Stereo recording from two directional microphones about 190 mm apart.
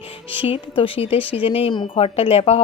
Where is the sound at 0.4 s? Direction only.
30° left (ahead or behind).